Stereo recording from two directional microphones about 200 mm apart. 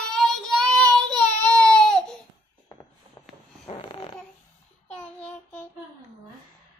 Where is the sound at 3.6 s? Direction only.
25° left (ahead or behind).